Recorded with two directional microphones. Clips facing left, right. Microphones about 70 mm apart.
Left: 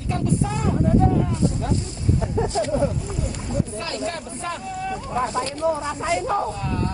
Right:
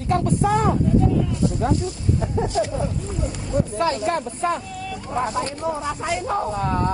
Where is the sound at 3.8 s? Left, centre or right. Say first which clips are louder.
Right 7 dB; right; by 5.5 s centre.